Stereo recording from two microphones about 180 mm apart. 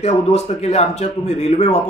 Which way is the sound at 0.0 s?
35° left (ahead or behind).